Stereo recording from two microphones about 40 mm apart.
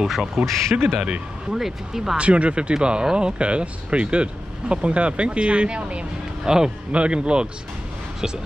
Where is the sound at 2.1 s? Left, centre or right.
Right.